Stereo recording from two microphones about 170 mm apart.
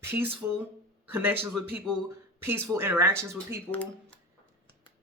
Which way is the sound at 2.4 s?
15° right (ahead or behind).